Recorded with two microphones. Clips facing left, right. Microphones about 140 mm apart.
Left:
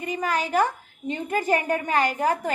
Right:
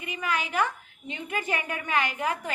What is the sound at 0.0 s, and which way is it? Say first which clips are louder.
A woman's voice: left 5 dB; 40° left (ahead or behind).